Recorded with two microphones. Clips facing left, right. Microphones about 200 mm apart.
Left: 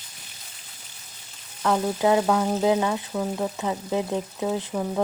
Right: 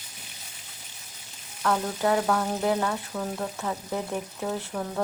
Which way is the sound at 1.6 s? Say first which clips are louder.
Left 4 dB; 15° left (ahead or behind).